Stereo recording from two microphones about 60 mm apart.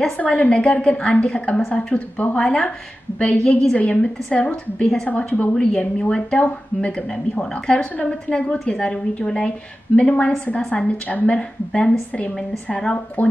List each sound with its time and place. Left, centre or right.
0.2 s a woman's voice: left
3.7 s a woman's voice: left
13.2 s a woman's voice: left